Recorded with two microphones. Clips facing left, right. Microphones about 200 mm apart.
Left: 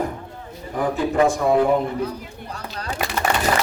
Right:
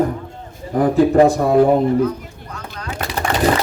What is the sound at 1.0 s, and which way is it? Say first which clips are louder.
Speech: right 7 dB; 35° right (ahead or behind).